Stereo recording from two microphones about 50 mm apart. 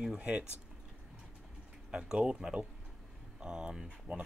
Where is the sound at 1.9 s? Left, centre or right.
Centre.